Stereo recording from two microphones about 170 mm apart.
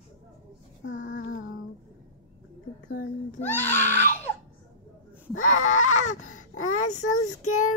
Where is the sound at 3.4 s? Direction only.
10° left (ahead or behind).